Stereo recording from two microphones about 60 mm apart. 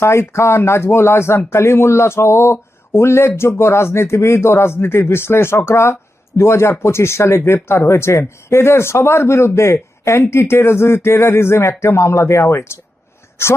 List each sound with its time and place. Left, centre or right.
0.0 s speech: left